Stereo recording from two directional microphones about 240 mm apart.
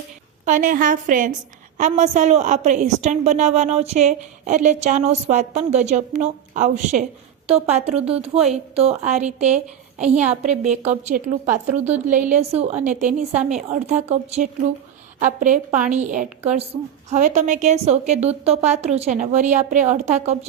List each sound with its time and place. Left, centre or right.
0.4 s a woman's voice: right
10.2 s a woman's voice: centre
10.6 s a woman's voice: right